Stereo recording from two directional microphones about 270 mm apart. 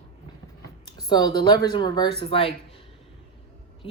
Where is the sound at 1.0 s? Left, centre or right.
Centre.